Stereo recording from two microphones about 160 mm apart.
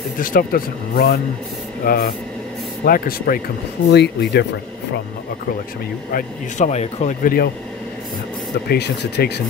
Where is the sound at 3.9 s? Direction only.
90° left.